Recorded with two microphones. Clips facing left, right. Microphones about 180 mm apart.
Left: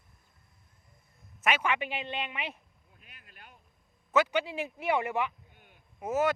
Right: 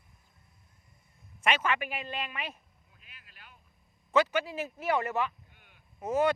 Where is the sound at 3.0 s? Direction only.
50° left (ahead or behind).